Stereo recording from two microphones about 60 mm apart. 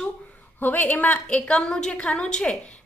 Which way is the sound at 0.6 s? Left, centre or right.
Left.